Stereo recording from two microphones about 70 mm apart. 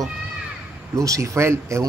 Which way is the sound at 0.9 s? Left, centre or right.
Right.